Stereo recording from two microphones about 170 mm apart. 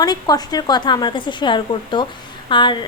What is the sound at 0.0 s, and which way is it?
A woman's voice, 25° left (ahead or behind).